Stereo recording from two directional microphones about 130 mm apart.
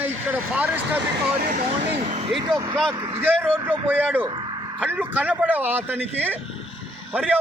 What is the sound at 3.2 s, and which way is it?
Speech, 15° right (ahead or behind).